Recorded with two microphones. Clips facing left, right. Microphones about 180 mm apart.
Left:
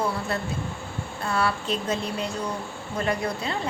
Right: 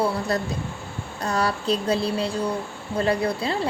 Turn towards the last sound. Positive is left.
turn(degrees=-30)  # may be behind; listen again after turning